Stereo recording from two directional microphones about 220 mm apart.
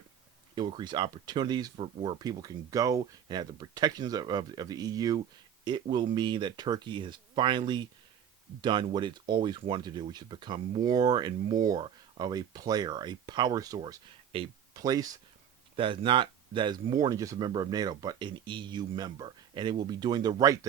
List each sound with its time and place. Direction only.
0.5 s speech: 20° right (ahead or behind)